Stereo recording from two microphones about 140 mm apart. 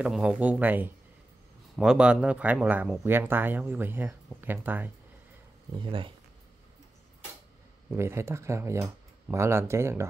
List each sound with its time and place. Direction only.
0.0 s speech: 5° right (ahead or behind)
5.7 s speech: 35° right (ahead or behind)
7.9 s speech: 20° right (ahead or behind)